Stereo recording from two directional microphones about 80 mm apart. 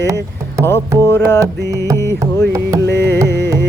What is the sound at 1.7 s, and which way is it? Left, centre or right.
Music, right.